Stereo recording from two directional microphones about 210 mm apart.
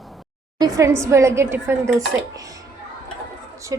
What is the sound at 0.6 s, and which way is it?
Speech, 15° right (ahead or behind).